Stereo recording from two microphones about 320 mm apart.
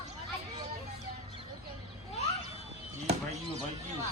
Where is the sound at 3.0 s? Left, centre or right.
Right.